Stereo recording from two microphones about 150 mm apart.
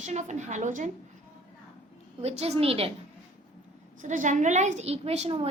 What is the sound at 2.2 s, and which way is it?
Speech, 45° right (ahead or behind).